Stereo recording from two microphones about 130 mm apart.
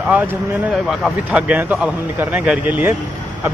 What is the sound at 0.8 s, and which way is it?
A man's voice, 5° right (ahead or behind).